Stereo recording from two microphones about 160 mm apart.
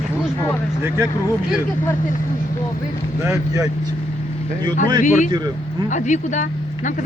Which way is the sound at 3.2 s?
20° right (ahead or behind).